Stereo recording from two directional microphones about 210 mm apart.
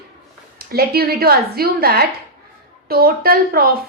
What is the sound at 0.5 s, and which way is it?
A woman's voice, 45° right (ahead or behind).